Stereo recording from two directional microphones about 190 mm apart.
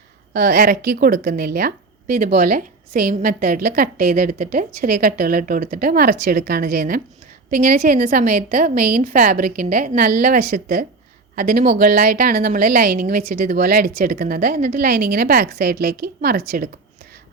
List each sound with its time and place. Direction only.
0.3 s a woman's voice: 50° right (ahead or behind)